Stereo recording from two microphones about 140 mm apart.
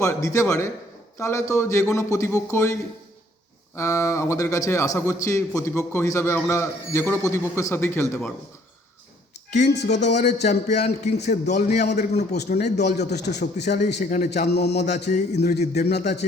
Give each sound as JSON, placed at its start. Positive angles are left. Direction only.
{"t": 0.0, "sound": "a man's voice", "side_deg": 20}
{"t": 3.8, "sound": "a man's voice", "side_deg": 20}
{"t": 9.6, "sound": "a man's voice", "side_deg": 55}